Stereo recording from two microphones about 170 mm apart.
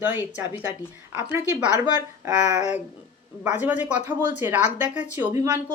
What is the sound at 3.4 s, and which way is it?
A woman's voice, 10° right (ahead or behind).